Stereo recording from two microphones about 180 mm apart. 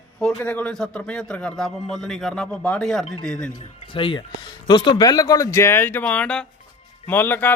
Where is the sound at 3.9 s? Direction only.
25° left (ahead or behind).